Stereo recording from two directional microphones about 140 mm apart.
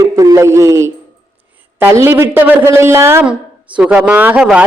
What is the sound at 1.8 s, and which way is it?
A man's voice, 15° right (ahead or behind).